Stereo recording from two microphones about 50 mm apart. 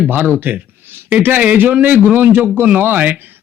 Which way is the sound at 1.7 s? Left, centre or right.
Right.